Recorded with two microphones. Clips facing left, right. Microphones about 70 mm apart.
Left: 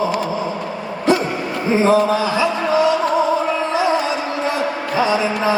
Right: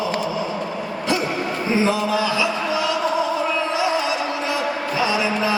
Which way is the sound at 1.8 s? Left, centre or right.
Left.